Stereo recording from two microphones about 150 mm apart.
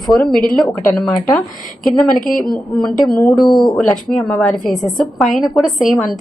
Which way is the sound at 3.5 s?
30° left (ahead or behind).